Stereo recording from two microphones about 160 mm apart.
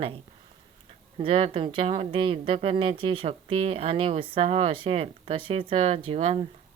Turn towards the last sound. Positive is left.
turn(degrees=-40)  # may be behind; listen again after turning